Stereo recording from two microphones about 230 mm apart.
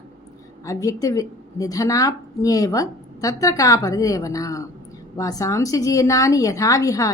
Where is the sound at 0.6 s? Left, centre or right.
Centre.